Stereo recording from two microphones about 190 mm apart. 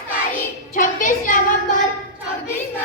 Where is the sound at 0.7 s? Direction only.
45° left (ahead or behind).